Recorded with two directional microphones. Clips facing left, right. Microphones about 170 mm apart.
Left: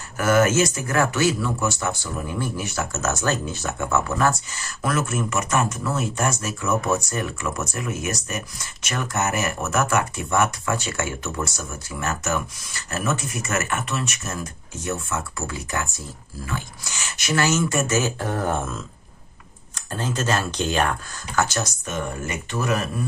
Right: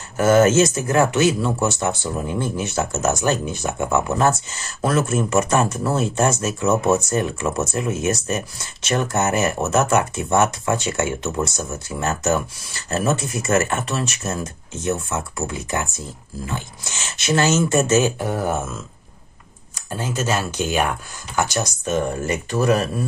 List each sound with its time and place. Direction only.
0.2 s speech: 25° right (ahead or behind)
21.8 s speech: 30° right (ahead or behind)